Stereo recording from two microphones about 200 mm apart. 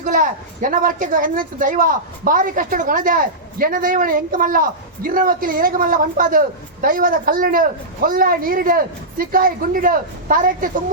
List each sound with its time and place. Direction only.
0.0 s a woman's voice: 40° right (ahead or behind)